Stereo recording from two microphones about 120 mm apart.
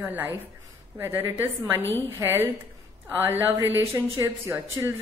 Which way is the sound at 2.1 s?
20° right (ahead or behind).